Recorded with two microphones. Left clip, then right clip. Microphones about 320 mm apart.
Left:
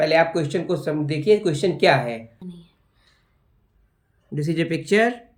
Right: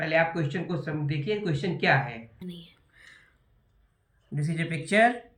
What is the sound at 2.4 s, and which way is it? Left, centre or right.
Whispering, centre.